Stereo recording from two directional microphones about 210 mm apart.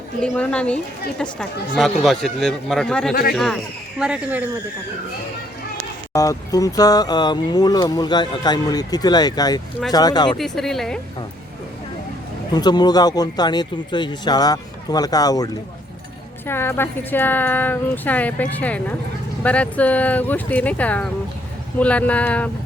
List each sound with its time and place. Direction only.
0.2 s a man's voice: 5° left (ahead or behind)
3.1 s speech: 50° left (ahead or behind)
3.3 s a man's voice: centre (ahead or behind)
6.1 s speech: 15° left (ahead or behind)
10.3 s a man's voice: centre (ahead or behind)
12.5 s speech: 20° left (ahead or behind)
16.5 s speech: 10° left (ahead or behind)